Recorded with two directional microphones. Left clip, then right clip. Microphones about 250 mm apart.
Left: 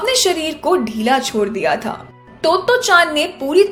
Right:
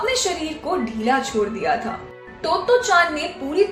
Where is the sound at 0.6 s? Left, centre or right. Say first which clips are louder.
Left 6 dB; left.